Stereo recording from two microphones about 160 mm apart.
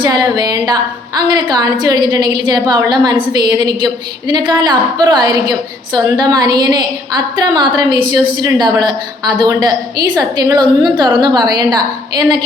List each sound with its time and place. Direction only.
0.0 s a woman's voice: 25° right (ahead or behind)